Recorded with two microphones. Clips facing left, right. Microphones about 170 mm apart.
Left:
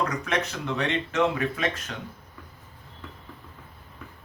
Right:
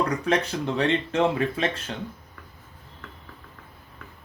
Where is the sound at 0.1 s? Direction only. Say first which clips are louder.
Right 4 dB; 30° right (ahead or behind).